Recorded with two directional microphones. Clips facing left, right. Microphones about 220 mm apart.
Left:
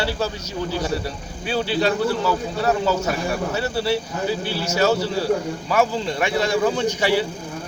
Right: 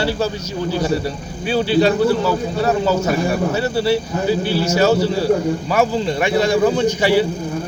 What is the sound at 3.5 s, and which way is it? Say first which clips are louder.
Speech: right 3 dB; 10° right (ahead or behind).